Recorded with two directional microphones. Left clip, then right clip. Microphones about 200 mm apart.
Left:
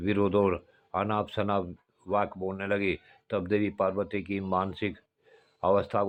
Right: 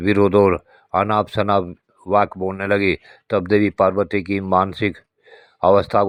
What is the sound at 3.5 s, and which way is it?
Speech, 30° right (ahead or behind).